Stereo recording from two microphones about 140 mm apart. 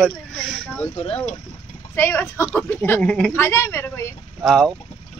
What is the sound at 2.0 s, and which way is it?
A woman's voice, 15° left (ahead or behind).